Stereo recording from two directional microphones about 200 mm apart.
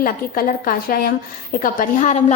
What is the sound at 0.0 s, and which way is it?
A woman's voice, 45° left (ahead or behind).